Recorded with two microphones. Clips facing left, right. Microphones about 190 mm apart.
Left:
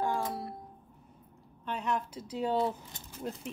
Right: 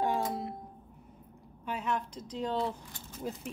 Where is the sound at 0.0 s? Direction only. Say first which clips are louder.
Right 1 dB; 20° right (ahead or behind).